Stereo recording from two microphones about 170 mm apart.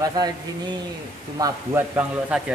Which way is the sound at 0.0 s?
25° right (ahead or behind).